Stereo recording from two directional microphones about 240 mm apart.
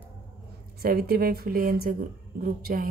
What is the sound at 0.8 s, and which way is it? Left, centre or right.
A woman's voice, right.